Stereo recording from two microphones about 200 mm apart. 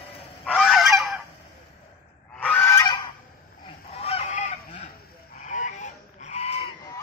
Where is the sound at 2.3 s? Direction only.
5° left (ahead or behind).